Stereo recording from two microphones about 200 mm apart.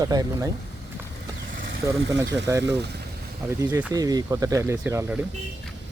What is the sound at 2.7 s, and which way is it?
Speech, 55° right (ahead or behind).